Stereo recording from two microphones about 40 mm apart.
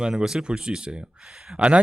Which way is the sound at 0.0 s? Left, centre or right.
Centre.